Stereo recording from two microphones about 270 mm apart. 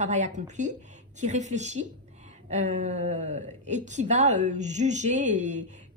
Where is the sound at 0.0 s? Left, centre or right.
Right.